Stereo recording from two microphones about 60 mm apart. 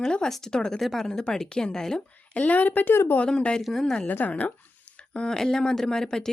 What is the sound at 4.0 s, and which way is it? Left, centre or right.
Speech, left.